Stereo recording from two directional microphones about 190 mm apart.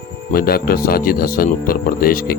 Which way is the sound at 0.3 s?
50° left (ahead or behind).